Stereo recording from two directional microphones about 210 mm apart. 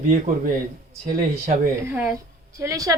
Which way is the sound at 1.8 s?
10° right (ahead or behind).